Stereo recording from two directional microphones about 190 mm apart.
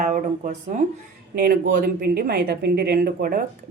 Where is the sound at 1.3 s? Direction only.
50° right (ahead or behind).